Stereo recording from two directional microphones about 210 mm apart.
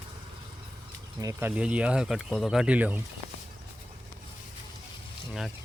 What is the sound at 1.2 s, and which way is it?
Speech, 15° right (ahead or behind).